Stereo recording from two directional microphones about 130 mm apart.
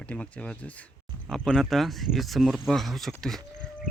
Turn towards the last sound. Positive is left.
turn(degrees=5)  # may be behind; listen again after turning